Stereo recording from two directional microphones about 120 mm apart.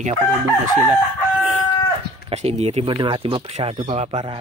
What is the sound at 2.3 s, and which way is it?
Speech, 60° right (ahead or behind).